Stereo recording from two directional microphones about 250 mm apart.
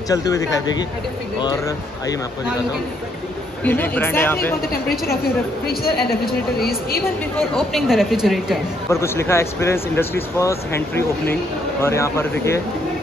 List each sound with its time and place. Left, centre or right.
0.1 s speech: centre
3.6 s speech: centre
4.6 s a woman's voice: left
7.5 s a woman's voice: centre
8.9 s speech: centre